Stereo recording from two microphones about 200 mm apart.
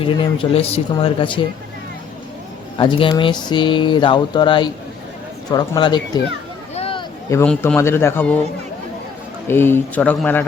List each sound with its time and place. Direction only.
0.0 s speech: 30° left (ahead or behind)
2.7 s speech: 25° left (ahead or behind)
6.7 s a sound: 30° left (ahead or behind)
7.3 s a man's voice: 15° left (ahead or behind)
9.5 s speech: 10° left (ahead or behind)